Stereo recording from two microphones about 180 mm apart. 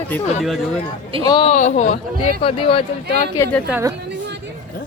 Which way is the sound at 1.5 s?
40° left (ahead or behind).